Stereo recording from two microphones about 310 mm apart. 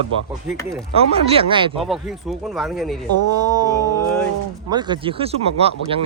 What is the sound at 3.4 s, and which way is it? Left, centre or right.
Speech, centre.